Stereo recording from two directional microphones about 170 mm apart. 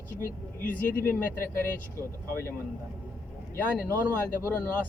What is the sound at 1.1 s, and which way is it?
Speech, 55° left (ahead or behind).